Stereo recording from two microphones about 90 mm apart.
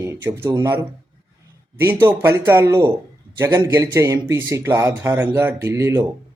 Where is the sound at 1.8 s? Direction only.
30° right (ahead or behind).